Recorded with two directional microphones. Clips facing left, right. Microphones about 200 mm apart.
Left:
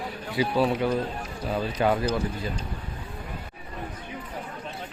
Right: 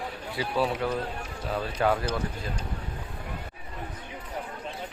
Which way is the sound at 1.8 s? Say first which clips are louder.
Left 2 dB; 15° left (ahead or behind).